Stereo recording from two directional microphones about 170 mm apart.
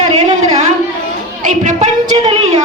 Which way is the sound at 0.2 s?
40° right (ahead or behind).